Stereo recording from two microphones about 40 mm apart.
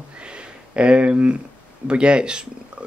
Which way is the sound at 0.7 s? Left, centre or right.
Right.